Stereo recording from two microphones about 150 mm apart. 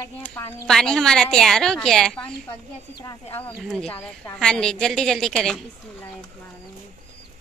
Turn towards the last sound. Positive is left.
turn(degrees=5)  # may be behind; listen again after turning